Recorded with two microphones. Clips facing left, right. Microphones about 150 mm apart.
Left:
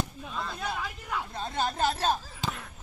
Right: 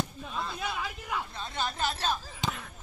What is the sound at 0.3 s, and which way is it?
Speech, 5° right (ahead or behind).